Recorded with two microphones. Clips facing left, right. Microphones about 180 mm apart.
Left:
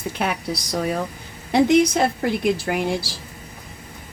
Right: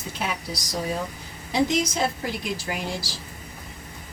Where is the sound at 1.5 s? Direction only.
60° left (ahead or behind).